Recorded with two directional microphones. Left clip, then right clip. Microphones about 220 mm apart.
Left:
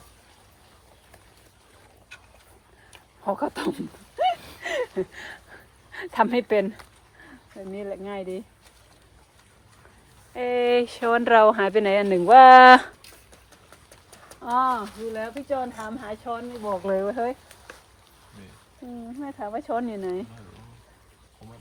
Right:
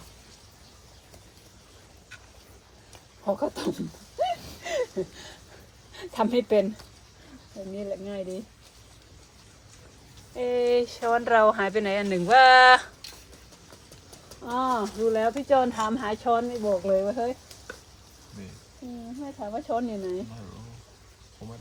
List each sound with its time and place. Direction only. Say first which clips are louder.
3.2 s speech: left 1 dB; 35° left (ahead or behind)
4.2 s a sound: left 4 dB; 40° left (ahead or behind)
5.9 s speech: left 4 dB; 35° left (ahead or behind)
7.8 s speech: left 1 dB; 35° left (ahead or behind)
10.3 s speech: left 2 dB; 40° left (ahead or behind)
14.6 s speech: left 2 dB; 10° left (ahead or behind)
15.1 s speech: right 6 dB; 15° right (ahead or behind)
15.4 s speech: right 6 dB; 30° right (ahead or behind)
16.8 s speech: even; 35° left (ahead or behind)
19.2 s speech: left 2 dB; 40° left (ahead or behind)